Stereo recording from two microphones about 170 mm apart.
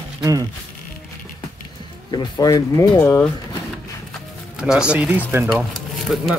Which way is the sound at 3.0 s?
10° left (ahead or behind).